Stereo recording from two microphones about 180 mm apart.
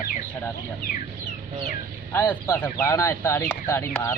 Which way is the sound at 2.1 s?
15° left (ahead or behind).